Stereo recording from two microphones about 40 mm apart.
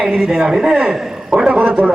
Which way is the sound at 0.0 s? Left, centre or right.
Centre.